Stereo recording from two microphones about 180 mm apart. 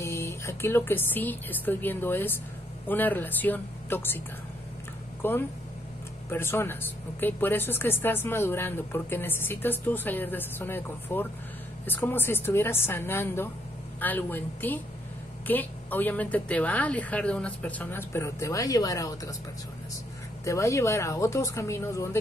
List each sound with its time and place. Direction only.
0.0 s speech: 15° left (ahead or behind)
5.2 s speech: 10° left (ahead or behind)
20.4 s speech: 15° left (ahead or behind)